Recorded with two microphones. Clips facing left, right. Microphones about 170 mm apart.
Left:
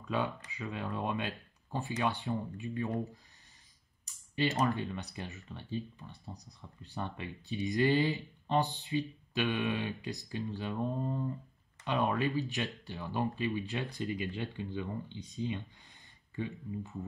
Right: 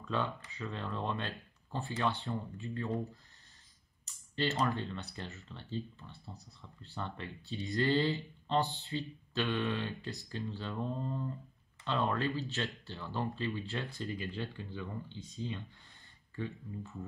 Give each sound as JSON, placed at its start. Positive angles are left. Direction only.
{"t": 0.0, "sound": "speech", "side_deg": 15}
{"t": 4.0, "sound": "typing", "side_deg": 15}
{"t": 4.7, "sound": "speech", "side_deg": 15}